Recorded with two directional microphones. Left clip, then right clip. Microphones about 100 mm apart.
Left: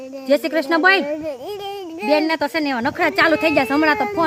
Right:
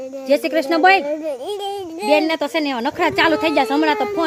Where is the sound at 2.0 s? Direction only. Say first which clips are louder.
Right 1 dB; 45° left (ahead or behind).